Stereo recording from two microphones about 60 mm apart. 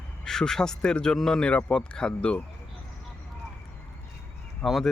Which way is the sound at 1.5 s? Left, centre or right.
Left.